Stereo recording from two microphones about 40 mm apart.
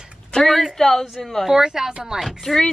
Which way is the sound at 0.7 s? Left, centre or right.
Centre.